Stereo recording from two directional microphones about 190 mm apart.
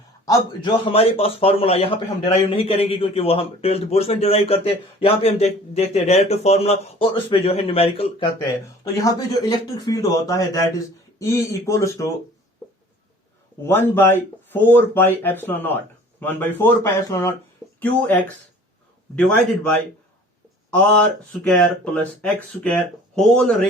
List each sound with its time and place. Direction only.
0.3 s a man's voice: 25° left (ahead or behind)
8.8 s speech: 15° left (ahead or behind)
13.7 s speech: 10° left (ahead or behind)
20.7 s speech: 5° left (ahead or behind)